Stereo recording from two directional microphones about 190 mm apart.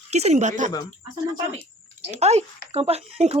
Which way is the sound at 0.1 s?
35° right (ahead or behind).